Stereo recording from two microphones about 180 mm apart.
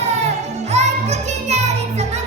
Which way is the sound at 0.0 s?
40° right (ahead or behind).